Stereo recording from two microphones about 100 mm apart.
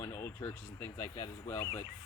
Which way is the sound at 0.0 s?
25° left (ahead or behind).